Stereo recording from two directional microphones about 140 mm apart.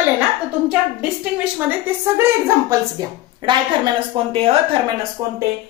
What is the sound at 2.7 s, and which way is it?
A woman's voice, 30° right (ahead or behind).